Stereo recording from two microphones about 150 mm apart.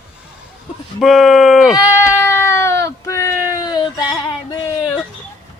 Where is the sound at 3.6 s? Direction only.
25° left (ahead or behind).